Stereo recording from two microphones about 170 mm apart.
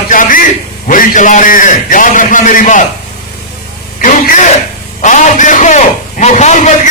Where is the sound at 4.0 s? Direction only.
50° left (ahead or behind).